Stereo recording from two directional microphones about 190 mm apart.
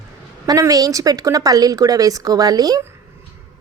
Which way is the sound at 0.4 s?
20° right (ahead or behind).